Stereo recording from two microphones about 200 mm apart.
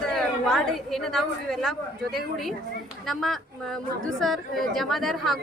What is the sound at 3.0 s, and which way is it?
Speech, centre (ahead or behind).